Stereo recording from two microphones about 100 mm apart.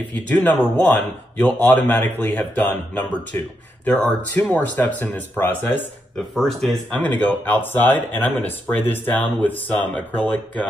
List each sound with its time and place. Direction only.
0.1 s speech: 15° left (ahead or behind)
6.1 s speech: 5° left (ahead or behind)
6.9 s speech: 15° left (ahead or behind)